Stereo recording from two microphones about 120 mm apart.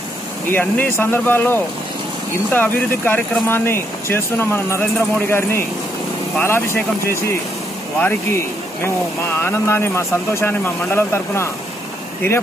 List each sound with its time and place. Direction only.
0.5 s speech: 15° left (ahead or behind)